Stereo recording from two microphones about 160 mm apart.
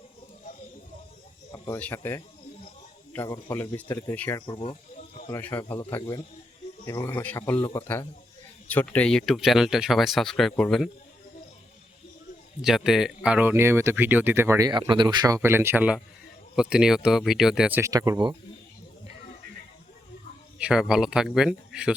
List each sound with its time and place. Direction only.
1.5 s speech: 20° left (ahead or behind)
3.5 s speech: 15° left (ahead or behind)
4.4 s speech: 30° left (ahead or behind)
5.3 s speech: 10° left (ahead or behind)
6.8 s speech: 15° left (ahead or behind)
7.5 s speech: 30° left (ahead or behind)
8.7 s speech: 10° left (ahead or behind)
12.6 s speech: centre (ahead or behind)
14.7 s speech: 30° right (ahead or behind)
15.4 s speech: 15° right (ahead or behind)
20.6 s speech: 5° right (ahead or behind)